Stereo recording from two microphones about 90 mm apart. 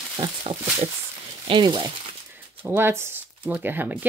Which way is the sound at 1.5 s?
55° right (ahead or behind).